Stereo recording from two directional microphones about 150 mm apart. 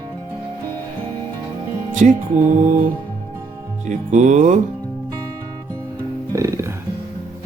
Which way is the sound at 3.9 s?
55° right (ahead or behind).